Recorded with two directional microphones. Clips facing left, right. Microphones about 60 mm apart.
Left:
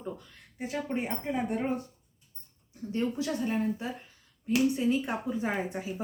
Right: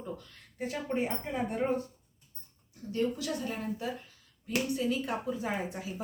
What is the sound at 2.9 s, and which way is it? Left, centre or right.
Speech, left.